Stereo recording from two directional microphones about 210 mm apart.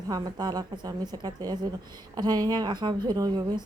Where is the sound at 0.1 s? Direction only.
20° right (ahead or behind).